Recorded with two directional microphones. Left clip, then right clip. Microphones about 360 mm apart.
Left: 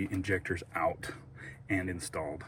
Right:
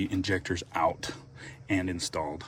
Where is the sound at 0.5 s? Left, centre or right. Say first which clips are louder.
Right 5 dB; right.